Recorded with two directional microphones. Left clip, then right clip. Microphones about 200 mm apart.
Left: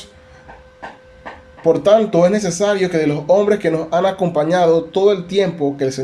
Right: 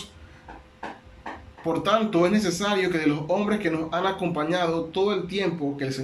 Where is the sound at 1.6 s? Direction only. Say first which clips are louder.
Left 11 dB; 35° left (ahead or behind).